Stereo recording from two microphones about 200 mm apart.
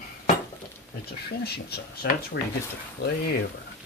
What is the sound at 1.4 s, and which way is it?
Speech, 55° left (ahead or behind).